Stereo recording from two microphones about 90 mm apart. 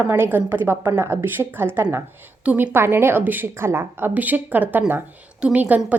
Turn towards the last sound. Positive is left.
turn(degrees=-20)  # may be behind; listen again after turning